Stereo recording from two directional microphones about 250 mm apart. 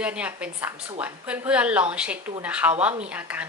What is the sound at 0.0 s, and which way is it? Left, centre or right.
A woman's voice, centre.